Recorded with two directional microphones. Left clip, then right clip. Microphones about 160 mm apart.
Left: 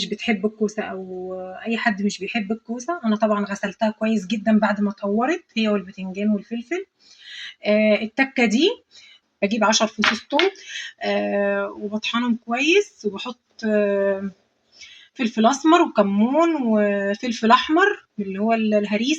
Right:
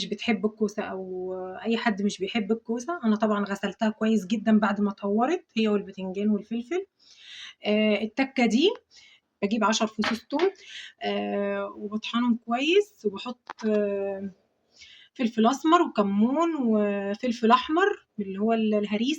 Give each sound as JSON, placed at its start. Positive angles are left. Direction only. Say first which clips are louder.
{"t": 0.0, "sound": "speech", "louder": "left 4 dB", "side_deg": 15}
{"t": 15.2, "sound": "speech", "louder": "left 5 dB", "side_deg": 20}